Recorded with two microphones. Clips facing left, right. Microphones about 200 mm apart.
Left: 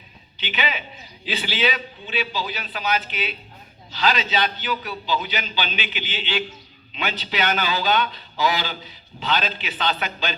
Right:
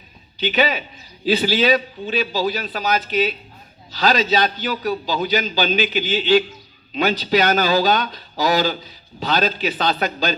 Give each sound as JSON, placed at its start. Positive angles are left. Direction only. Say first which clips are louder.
{"t": 0.3, "sound": "a man's voice", "louder": "right 8 dB", "side_deg": -40}